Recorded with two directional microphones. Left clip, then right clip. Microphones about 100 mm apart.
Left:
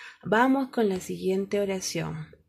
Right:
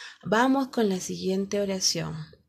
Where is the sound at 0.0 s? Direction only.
25° right (ahead or behind).